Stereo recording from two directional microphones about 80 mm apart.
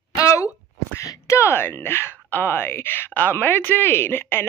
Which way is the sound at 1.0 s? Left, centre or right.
Left.